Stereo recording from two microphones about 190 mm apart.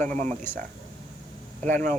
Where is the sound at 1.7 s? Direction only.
40° right (ahead or behind).